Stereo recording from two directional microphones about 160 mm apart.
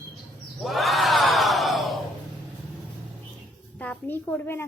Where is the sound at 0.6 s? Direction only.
Centre (ahead or behind).